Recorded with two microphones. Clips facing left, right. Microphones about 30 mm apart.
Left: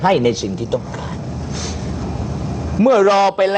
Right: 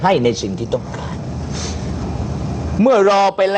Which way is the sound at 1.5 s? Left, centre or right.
Centre.